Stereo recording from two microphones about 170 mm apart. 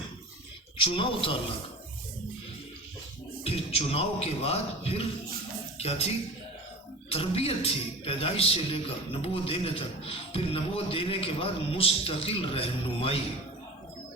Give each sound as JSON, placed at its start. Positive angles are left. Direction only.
{"t": 0.8, "sound": "a man's voice", "side_deg": 30}
{"t": 3.4, "sound": "a man's voice", "side_deg": 35}
{"t": 7.1, "sound": "a man's voice", "side_deg": 35}